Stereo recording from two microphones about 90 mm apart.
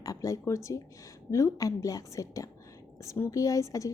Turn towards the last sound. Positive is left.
turn(degrees=35)  # may be behind; listen again after turning